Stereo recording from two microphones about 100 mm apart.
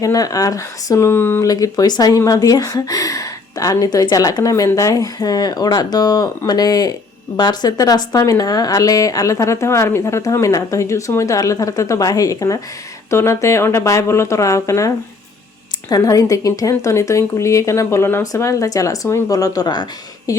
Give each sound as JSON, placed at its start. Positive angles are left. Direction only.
{"t": 0.0, "sound": "speech", "side_deg": 35}
{"t": 1.5, "sound": "speech", "side_deg": 40}